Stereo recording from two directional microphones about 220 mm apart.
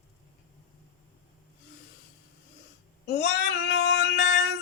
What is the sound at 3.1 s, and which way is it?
Child singing, 50° left (ahead or behind).